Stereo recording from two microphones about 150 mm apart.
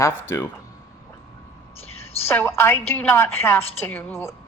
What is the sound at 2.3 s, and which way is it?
Speech, 15° left (ahead or behind).